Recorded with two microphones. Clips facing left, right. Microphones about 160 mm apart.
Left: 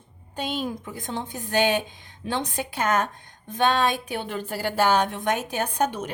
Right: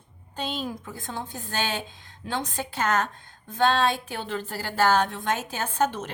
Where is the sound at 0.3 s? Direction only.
15° left (ahead or behind).